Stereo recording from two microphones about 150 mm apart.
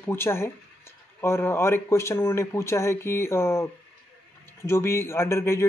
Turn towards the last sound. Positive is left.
turn(degrees=15)  # may be behind; listen again after turning